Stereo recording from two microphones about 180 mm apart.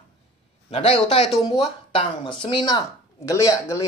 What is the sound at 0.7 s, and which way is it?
Speech, 35° left (ahead or behind).